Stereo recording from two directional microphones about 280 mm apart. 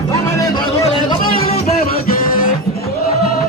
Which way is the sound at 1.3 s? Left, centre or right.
Left.